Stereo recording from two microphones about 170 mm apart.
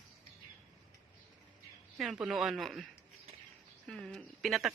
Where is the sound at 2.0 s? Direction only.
5° right (ahead or behind).